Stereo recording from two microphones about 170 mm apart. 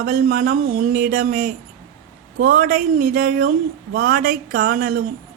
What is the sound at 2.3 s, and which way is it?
Speech, 55° right (ahead or behind).